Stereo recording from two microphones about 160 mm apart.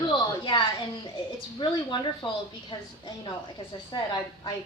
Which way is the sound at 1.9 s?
30° left (ahead or behind).